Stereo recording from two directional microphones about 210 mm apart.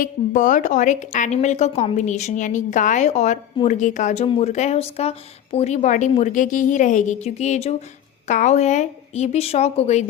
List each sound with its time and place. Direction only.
0.0 s a woman's voice: 40° left (ahead or behind)